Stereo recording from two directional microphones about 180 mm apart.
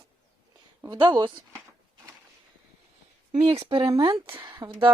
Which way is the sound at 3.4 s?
30° right (ahead or behind).